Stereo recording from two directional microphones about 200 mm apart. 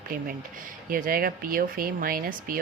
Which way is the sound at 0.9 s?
45° right (ahead or behind).